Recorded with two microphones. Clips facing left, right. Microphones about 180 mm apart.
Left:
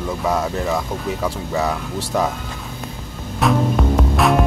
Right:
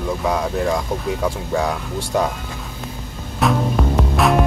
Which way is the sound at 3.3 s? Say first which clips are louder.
Left 1 dB; centre (ahead or behind).